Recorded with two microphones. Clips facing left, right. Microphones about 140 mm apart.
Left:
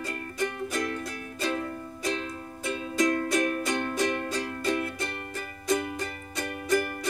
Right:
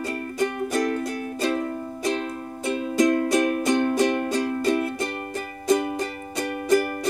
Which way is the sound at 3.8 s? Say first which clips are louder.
Right 7 dB; 50° right (ahead or behind).